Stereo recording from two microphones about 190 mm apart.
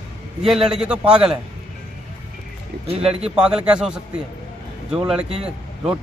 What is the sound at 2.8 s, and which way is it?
Speech, 30° right (ahead or behind).